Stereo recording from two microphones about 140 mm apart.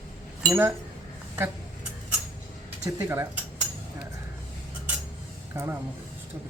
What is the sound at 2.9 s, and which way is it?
Speech, 20° right (ahead or behind).